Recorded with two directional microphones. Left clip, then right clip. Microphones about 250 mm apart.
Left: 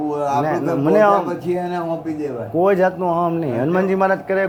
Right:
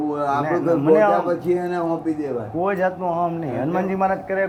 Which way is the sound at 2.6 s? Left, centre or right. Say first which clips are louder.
Left 6 dB; left.